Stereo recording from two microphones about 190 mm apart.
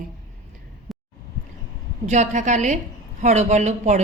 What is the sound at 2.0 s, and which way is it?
Speech, 40° right (ahead or behind).